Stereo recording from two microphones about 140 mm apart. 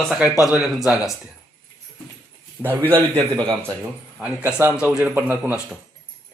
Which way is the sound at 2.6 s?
15° right (ahead or behind).